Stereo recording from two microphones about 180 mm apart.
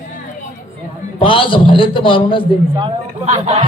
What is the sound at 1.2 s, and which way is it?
A man's voice, 30° left (ahead or behind).